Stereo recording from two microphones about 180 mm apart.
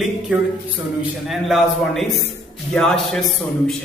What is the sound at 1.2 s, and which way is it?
A man's voice, centre (ahead or behind).